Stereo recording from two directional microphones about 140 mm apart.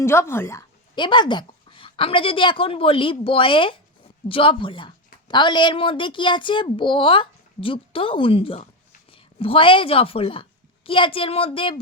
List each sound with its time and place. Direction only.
0.0 s a woman's voice: 20° left (ahead or behind)
0.9 s a child's voice: 35° left (ahead or behind)